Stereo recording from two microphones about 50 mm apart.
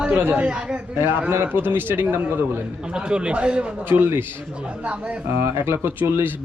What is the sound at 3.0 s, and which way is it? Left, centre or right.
Speech, centre.